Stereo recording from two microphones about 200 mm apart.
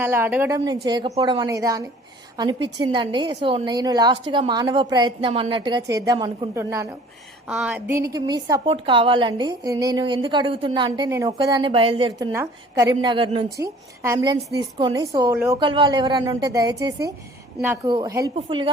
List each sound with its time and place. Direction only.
0.0 s a woman's voice: 10° right (ahead or behind)